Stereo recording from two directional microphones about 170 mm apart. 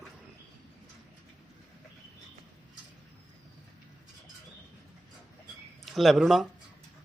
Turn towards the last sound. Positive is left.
turn(degrees=0)  # may be behind; listen again after turning